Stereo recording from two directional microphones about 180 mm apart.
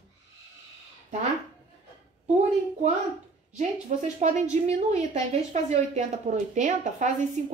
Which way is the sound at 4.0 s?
45° right (ahead or behind).